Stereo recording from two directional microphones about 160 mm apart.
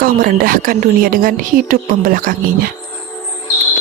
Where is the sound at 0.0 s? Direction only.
65° right (ahead or behind).